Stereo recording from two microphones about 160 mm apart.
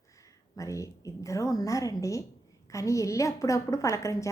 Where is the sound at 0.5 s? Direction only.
20° left (ahead or behind).